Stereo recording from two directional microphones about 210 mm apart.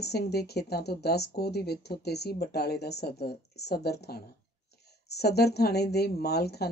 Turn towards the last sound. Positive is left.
turn(degrees=50)  # may be behind; listen again after turning